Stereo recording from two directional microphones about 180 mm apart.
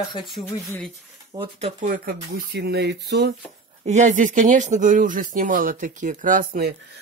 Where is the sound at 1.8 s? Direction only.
50° right (ahead or behind); by 3.3 s 70° right (ahead or behind).